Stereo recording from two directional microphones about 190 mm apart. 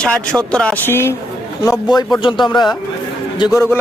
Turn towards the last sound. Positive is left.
turn(degrees=15)  # may be behind; listen again after turning